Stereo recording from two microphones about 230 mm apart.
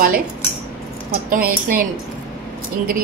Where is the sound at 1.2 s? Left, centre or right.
Right.